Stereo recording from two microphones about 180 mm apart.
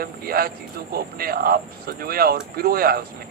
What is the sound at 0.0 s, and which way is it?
A man's voice, 55° right (ahead or behind).